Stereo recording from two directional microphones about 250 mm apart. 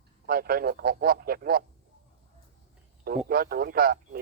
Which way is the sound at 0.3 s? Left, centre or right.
Right.